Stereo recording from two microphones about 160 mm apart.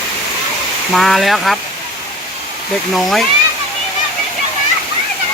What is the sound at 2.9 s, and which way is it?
Speech, centre (ahead or behind).